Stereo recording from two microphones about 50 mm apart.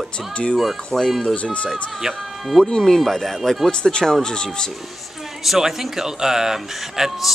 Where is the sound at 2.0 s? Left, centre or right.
Centre.